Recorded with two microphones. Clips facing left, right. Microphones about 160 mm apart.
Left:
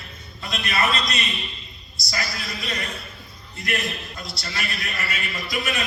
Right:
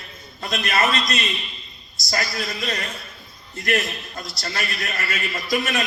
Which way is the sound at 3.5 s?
45° right (ahead or behind).